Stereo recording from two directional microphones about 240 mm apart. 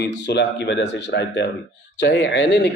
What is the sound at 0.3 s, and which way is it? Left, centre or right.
A man's voice, left.